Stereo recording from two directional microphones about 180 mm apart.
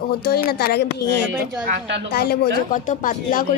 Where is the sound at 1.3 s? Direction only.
5° right (ahead or behind).